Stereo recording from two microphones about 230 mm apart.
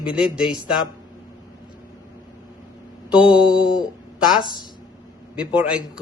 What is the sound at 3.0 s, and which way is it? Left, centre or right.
Speech, centre.